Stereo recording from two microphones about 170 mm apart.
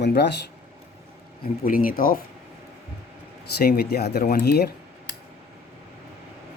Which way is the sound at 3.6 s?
65° left (ahead or behind).